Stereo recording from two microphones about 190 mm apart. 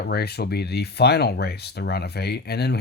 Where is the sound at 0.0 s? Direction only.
55° left (ahead or behind).